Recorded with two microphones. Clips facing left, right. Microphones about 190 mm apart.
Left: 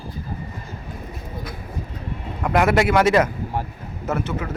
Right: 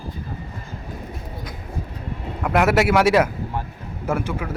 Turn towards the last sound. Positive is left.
turn(degrees=-10)  # may be behind; listen again after turning